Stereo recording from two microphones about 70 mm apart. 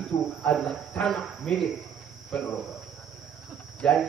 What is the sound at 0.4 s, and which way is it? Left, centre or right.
A man's voice, centre.